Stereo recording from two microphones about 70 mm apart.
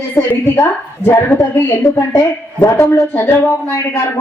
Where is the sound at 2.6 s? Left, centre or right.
Left.